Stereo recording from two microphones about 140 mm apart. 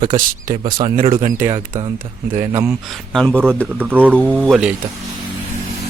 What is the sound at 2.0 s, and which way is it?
Speech, 70° right (ahead or behind).